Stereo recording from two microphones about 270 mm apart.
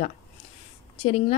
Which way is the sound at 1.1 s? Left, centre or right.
Left.